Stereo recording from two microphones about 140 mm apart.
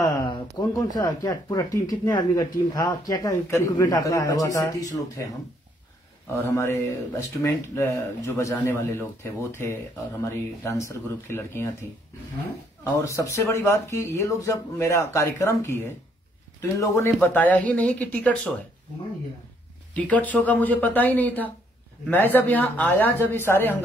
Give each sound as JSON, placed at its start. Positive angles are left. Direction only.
{"t": 0.0, "sound": "speech", "side_deg": 30}
{"t": 6.3, "sound": "speech", "side_deg": 20}
{"t": 12.8, "sound": "speech", "side_deg": 20}
{"t": 19.9, "sound": "speech", "side_deg": 10}